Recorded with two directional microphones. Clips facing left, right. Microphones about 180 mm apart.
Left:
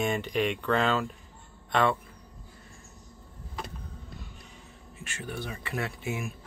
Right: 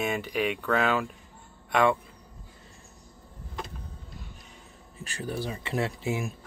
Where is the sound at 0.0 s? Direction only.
5° right (ahead or behind).